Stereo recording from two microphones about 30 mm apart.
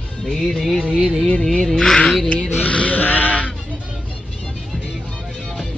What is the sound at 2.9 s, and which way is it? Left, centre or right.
Honk, left.